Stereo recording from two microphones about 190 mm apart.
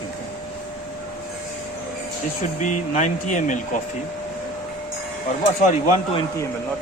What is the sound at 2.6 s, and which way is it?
Speech, 40° left (ahead or behind).